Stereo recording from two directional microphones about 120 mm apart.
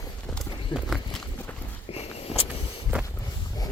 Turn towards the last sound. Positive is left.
turn(degrees=-15)  # may be behind; listen again after turning